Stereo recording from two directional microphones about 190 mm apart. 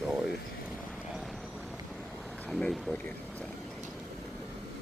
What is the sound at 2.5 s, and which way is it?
Speech, centre (ahead or behind).